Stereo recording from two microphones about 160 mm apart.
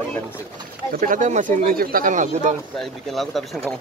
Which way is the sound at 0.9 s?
55° right (ahead or behind).